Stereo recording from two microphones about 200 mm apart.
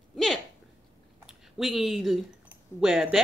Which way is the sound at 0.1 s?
Centre (ahead or behind).